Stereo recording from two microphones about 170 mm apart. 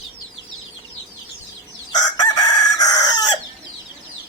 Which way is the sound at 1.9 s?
25° left (ahead or behind).